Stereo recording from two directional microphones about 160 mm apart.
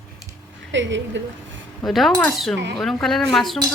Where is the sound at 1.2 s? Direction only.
90° right.